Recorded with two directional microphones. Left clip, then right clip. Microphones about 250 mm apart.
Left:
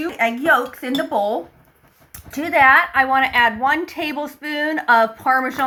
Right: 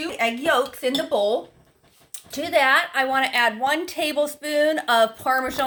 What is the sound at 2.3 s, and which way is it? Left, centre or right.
A woman's voice, right.